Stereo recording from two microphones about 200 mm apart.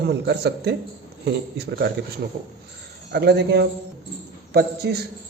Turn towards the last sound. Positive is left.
turn(degrees=-55)  # may be behind; listen again after turning